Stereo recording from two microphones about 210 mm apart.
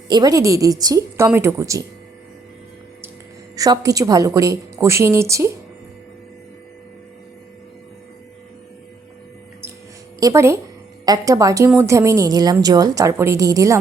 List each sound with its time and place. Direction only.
0.1 s a woman's voice: 15° right (ahead or behind)
3.5 s a woman's voice: 15° right (ahead or behind)
10.2 s a woman's voice: 15° right (ahead or behind)